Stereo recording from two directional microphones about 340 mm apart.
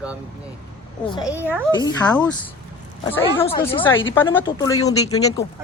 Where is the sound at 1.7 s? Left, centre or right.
Centre.